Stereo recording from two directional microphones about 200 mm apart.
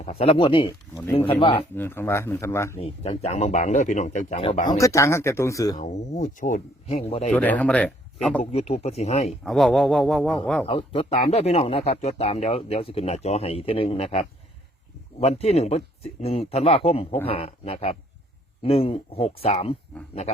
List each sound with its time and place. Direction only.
0.0 s speech: 30° left (ahead or behind)
1.7 s speech: 10° left (ahead or behind)
2.8 s speech: 30° left (ahead or behind)
4.8 s speech: 15° left (ahead or behind)
5.7 s speech: 35° left (ahead or behind)
7.3 s speech: 10° left (ahead or behind)
8.4 s speech: 30° left (ahead or behind)
9.4 s speech: centre (ahead or behind)
10.7 s speech: 30° left (ahead or behind)